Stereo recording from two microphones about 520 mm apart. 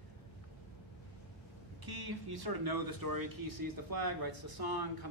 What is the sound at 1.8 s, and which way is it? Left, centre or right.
Speech, right.